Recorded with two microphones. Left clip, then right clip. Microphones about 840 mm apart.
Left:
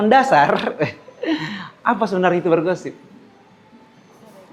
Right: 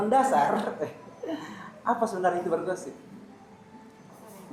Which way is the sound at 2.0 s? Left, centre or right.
Left.